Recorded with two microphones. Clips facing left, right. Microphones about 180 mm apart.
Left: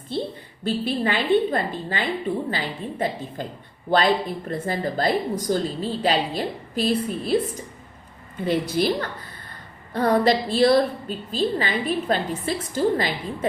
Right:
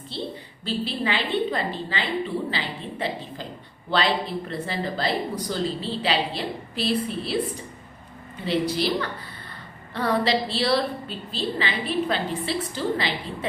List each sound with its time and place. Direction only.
0.1 s speech: 50° left (ahead or behind)
8.4 s speech: 50° left (ahead or behind)